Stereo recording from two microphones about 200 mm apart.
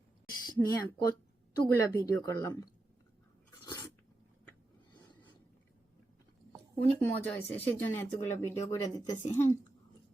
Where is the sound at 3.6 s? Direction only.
20° left (ahead or behind).